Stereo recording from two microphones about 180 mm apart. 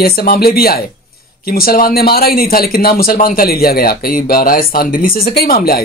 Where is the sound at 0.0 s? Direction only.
55° left (ahead or behind).